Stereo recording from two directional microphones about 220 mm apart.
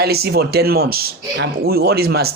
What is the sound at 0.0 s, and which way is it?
Speech, 45° right (ahead or behind).